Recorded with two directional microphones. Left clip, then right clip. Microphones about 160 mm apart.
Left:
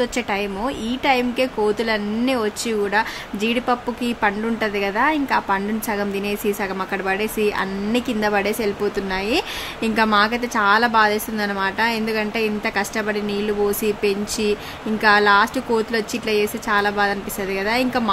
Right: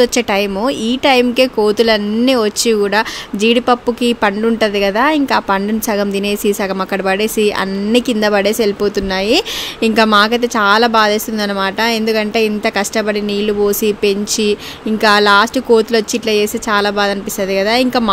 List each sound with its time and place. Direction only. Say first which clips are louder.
0.0 s speech: right 9 dB; 45° right (ahead or behind)